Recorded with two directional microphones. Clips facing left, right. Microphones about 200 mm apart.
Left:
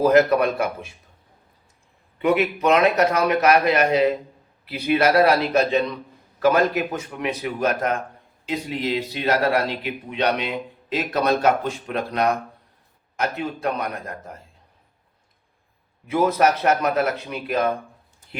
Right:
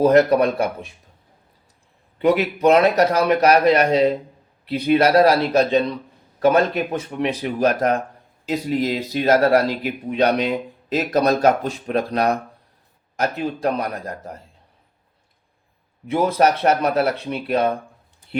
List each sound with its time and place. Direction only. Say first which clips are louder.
0.0 s speech: right 2 dB; 30° right (ahead or behind)
2.1 s speech: right 2 dB; 35° right (ahead or behind)
13.6 s speech: right 4 dB; 35° right (ahead or behind)
16.0 s speech: right 1 dB; 30° right (ahead or behind)